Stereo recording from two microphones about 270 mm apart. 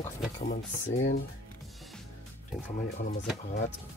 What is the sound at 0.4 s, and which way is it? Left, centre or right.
Speech, left.